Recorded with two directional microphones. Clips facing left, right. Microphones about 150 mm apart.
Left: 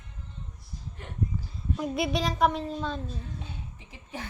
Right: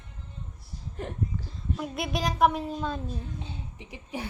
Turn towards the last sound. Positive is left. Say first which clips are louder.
# right 4 dB
turn(degrees=-15)  # may be behind; listen again after turning